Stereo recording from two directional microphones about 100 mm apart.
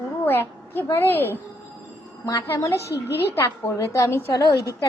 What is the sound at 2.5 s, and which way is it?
A woman's voice, 30° left (ahead or behind).